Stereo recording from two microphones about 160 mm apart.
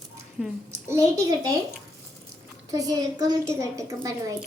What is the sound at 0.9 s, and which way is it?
Speech, 20° right (ahead or behind).